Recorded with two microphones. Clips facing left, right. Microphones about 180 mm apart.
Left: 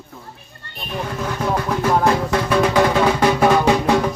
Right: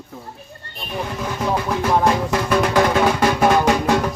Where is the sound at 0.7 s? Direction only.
Centre (ahead or behind).